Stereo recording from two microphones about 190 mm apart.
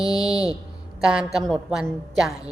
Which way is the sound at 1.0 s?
5° right (ahead or behind).